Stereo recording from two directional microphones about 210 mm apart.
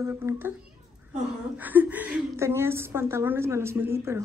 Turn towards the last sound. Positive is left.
turn(degrees=-10)  # may be behind; listen again after turning